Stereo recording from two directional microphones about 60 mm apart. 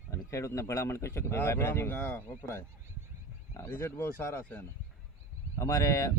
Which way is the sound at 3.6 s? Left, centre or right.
Left.